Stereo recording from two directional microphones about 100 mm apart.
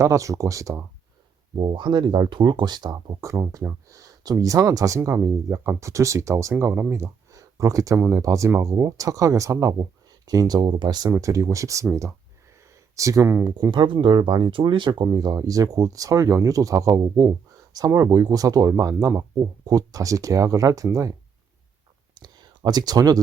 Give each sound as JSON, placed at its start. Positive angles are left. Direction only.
{"t": 0.0, "sound": "speech", "side_deg": -30}
{"t": 1.5, "sound": "speech", "side_deg": -50}
{"t": 3.2, "sound": "speech", "side_deg": -30}
{"t": 11.1, "sound": "speech", "side_deg": -35}
{"t": 13.0, "sound": "speech", "side_deg": -30}
{"t": 13.7, "sound": "speech", "side_deg": -55}
{"t": 15.0, "sound": "speech", "side_deg": -40}
{"t": 22.1, "sound": "a sound", "side_deg": -45}